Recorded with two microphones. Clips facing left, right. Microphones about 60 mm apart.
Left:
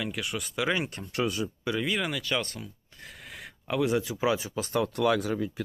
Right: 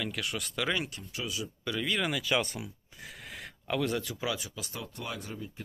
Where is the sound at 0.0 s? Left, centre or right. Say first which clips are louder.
Left 2 dB; centre.